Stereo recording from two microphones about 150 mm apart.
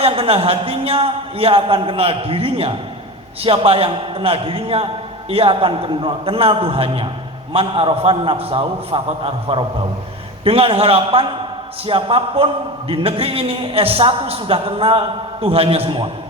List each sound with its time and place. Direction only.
0.0 s a man's voice: 40° right (ahead or behind)